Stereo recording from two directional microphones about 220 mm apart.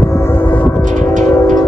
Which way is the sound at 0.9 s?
35° right (ahead or behind).